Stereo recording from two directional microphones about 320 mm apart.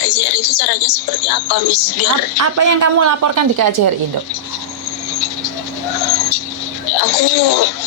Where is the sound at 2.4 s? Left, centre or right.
Right.